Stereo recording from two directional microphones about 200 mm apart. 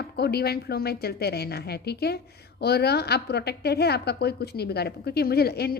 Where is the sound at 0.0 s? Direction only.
55° left (ahead or behind).